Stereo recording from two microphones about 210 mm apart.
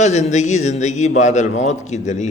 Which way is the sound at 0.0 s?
35° left (ahead or behind).